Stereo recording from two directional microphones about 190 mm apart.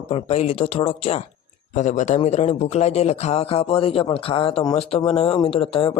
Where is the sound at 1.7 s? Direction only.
40° left (ahead or behind).